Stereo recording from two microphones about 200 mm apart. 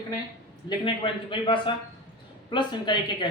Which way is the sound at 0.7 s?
25° left (ahead or behind).